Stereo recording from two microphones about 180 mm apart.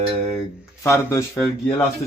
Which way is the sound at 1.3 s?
5° left (ahead or behind).